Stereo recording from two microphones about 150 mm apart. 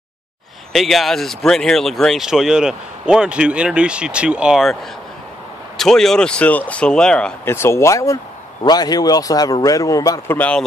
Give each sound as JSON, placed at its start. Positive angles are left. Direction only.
{"t": 0.7, "sound": "speech", "side_deg": 0}
{"t": 5.8, "sound": "speech", "side_deg": 5}
{"t": 7.4, "sound": "a man's voice", "side_deg": 15}
{"t": 10.3, "sound": "speech", "side_deg": 10}